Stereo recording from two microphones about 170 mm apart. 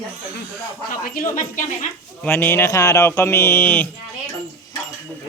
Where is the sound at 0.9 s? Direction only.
55° left (ahead or behind).